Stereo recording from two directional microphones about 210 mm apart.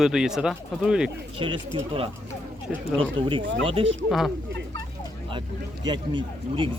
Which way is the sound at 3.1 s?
25° right (ahead or behind).